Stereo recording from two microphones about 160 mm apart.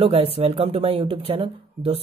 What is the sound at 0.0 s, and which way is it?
Speech, 35° right (ahead or behind).